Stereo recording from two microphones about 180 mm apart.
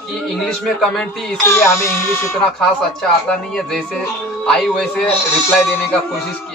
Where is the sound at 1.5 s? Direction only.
15° left (ahead or behind).